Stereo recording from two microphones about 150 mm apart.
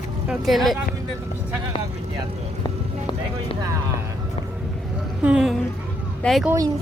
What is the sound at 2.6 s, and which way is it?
Music, 30° left (ahead or behind).